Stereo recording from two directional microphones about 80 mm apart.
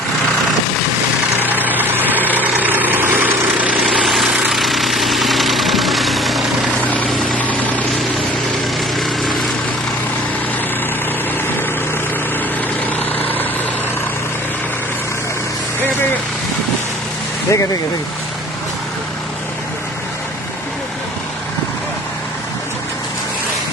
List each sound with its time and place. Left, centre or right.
1.4 s vehicle: right
3.8 s vehicle: centre
9.0 s vehicle: centre
13.2 s vehicle: left
17.5 s speech: left